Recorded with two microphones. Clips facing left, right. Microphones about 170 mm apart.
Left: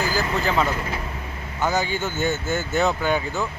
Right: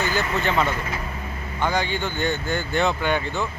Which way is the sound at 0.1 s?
Centre (ahead or behind).